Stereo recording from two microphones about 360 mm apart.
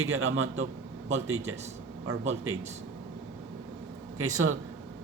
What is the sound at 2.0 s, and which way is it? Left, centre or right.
Speech, right.